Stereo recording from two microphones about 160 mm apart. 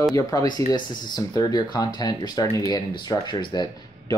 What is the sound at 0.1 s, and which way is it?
Speech, 20° left (ahead or behind).